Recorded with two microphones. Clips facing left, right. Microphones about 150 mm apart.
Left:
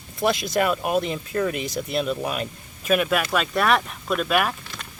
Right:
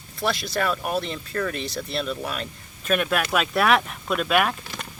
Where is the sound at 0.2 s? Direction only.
20° left (ahead or behind).